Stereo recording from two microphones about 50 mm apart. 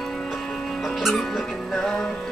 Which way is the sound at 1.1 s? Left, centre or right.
Centre.